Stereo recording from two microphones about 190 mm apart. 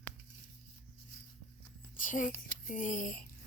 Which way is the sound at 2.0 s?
45° left (ahead or behind).